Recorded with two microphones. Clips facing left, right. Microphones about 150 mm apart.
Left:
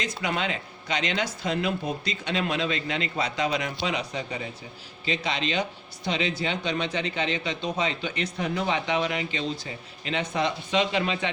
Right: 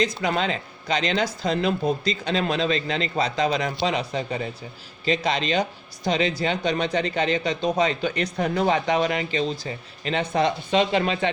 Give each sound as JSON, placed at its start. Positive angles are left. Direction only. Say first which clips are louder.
{"t": 0.2, "sound": "speech", "louder": "right 4 dB", "side_deg": -40}